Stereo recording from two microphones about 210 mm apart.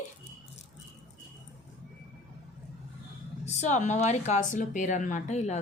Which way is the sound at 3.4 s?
35° left (ahead or behind).